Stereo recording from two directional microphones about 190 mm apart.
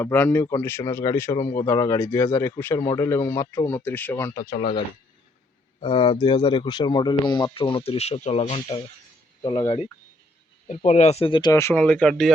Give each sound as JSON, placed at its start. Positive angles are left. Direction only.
{"t": 0.0, "sound": "speech", "side_deg": 10}
{"t": 5.8, "sound": "speech", "side_deg": 25}